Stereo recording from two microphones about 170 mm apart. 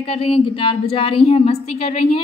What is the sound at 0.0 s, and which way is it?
A woman's voice, 35° left (ahead or behind).